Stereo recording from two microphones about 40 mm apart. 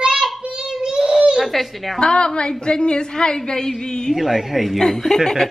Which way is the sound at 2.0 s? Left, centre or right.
Left.